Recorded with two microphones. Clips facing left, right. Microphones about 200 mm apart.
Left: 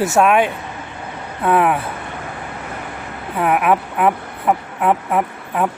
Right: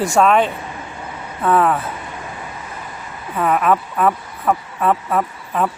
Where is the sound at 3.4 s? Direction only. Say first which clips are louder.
Even; 15° left (ahead or behind).